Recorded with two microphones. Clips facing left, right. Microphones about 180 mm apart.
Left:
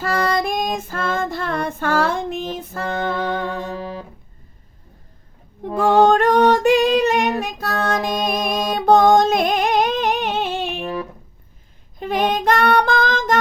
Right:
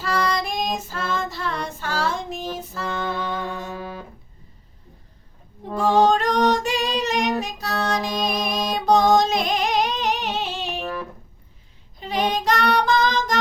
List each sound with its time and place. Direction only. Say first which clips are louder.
0.0 s female singing: left 4 dB; 55° left (ahead or behind)
5.7 s female singing: left 4 dB; 55° left (ahead or behind)
11.9 s child singing: left 4 dB; 55° left (ahead or behind)